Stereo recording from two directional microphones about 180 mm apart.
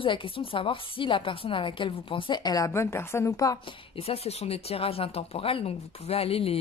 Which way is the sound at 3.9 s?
35° left (ahead or behind).